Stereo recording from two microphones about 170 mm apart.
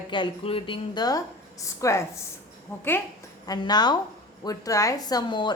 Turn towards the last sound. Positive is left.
turn(degrees=25)  # may be behind; listen again after turning